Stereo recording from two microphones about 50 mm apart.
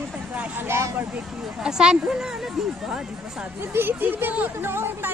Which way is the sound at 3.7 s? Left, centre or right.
Right.